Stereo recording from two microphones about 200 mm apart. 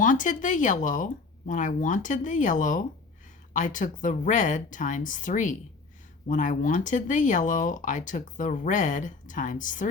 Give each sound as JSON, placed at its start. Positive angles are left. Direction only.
{"t": 0.0, "sound": "speech", "side_deg": 40}